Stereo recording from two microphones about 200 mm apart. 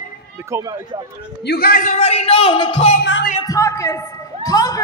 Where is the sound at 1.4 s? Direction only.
50° left (ahead or behind); by 2.9 s 30° left (ahead or behind).